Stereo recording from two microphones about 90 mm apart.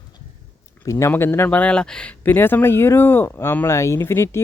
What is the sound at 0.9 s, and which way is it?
Speech, 30° left (ahead or behind).